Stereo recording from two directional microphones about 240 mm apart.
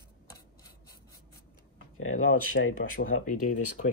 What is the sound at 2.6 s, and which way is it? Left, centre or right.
Speech, left.